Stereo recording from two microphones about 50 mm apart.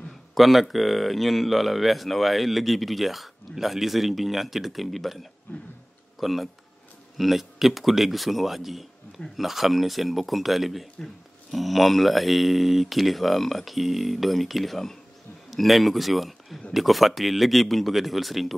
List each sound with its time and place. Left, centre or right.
0.3 s speech: centre
5.5 s a sound: left
6.1 s speech: centre